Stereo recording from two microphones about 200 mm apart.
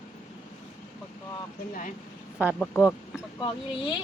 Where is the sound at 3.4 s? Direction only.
25° left (ahead or behind).